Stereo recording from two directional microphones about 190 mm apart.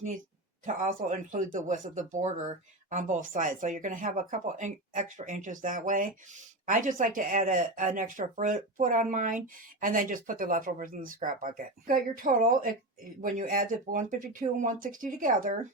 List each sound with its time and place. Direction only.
0.6 s speech: 45° right (ahead or behind)